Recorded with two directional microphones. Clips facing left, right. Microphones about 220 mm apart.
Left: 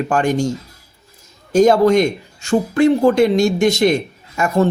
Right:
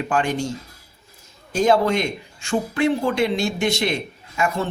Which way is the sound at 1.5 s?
45° left (ahead or behind).